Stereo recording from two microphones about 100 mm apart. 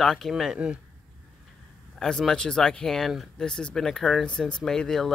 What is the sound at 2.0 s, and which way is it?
Speech, 5° left (ahead or behind).